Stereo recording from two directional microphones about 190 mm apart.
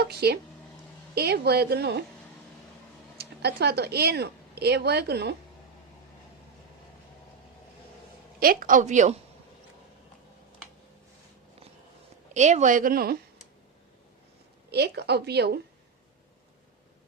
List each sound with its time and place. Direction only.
0.1 s a woman's voice: 55° right (ahead or behind)
3.2 s speech: 60° right (ahead or behind)
8.4 s a woman's voice: 45° right (ahead or behind)
12.3 s a woman's voice: 40° right (ahead or behind)
14.7 s a woman's voice: 60° right (ahead or behind)